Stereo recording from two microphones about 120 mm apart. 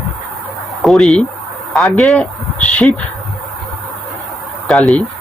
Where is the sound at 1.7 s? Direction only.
Centre (ahead or behind).